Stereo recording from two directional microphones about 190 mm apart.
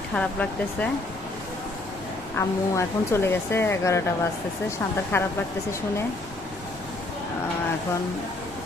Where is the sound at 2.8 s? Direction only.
15° left (ahead or behind).